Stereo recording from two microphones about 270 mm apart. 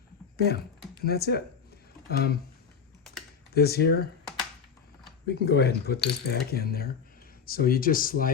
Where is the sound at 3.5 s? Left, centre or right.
Left.